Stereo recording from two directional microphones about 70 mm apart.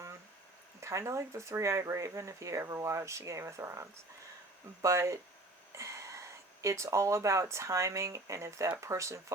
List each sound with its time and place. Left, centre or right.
0.8 s speech: right